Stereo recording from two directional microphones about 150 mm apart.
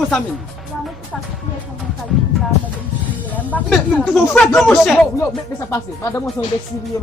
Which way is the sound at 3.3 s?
10° left (ahead or behind).